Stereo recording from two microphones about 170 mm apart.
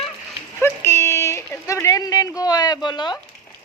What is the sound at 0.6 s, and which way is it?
Speech, 15° left (ahead or behind).